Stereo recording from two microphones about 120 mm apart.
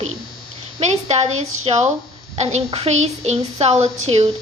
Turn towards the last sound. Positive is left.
turn(degrees=-55)  # may be behind; listen again after turning